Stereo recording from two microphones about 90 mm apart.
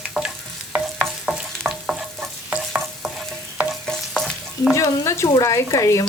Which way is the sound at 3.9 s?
5° left (ahead or behind).